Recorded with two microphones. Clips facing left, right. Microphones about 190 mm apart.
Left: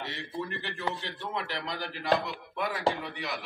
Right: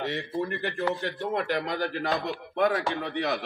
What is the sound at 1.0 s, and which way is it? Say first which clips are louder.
A man's voice: right 7 dB; 50° right (ahead or behind).